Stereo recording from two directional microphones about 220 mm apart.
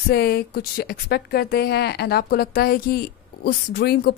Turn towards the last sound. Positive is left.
turn(degrees=45)  # may be behind; listen again after turning